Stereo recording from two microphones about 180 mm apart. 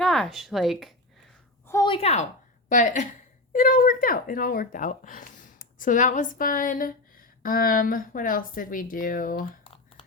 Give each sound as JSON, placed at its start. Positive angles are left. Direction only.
{"t": 0.0, "sound": "speech", "side_deg": 0}
{"t": 1.6, "sound": "a sound", "side_deg": 15}
{"t": 1.9, "sound": "a woman's voice", "side_deg": 35}